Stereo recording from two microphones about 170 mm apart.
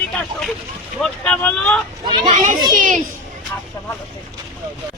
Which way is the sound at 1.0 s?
5° left (ahead or behind).